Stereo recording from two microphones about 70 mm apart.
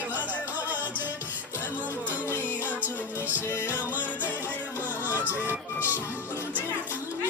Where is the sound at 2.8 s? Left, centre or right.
Right.